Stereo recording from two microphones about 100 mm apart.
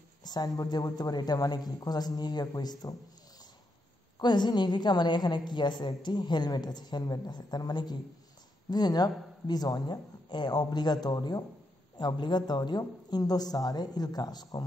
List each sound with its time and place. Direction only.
0.2 s a woman's voice: 45° left (ahead or behind)
4.2 s a woman's voice: 45° left (ahead or behind)